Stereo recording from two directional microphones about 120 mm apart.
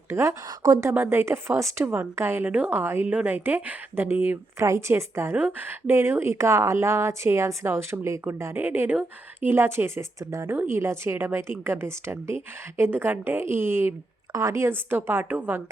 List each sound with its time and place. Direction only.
0.1 s speech: 25° right (ahead or behind)